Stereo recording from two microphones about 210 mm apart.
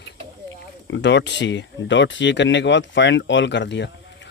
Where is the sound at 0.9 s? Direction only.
55° left (ahead or behind).